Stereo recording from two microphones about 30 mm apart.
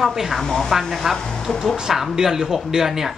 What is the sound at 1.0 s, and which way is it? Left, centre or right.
Speech, centre.